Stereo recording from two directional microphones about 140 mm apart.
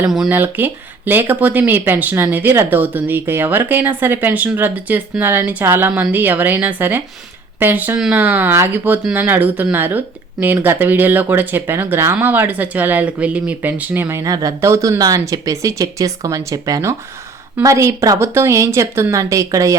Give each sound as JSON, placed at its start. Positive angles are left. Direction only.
{"t": 0.3, "sound": "a woman's voice", "side_deg": -15}